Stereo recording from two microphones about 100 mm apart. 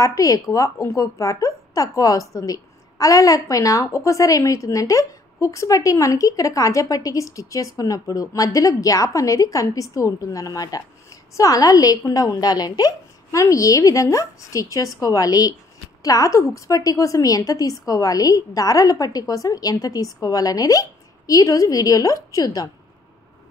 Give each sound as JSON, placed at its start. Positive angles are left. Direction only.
{"t": 0.0, "sound": "a woman's voice", "side_deg": 35}